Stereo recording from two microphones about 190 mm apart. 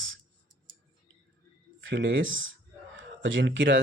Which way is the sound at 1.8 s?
80° right.